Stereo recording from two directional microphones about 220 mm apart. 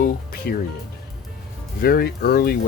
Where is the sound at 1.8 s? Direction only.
45° left (ahead or behind).